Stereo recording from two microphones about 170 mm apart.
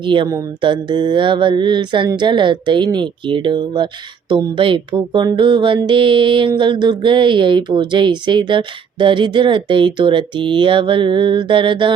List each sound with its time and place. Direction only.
0.0 s mantra: 30° right (ahead or behind)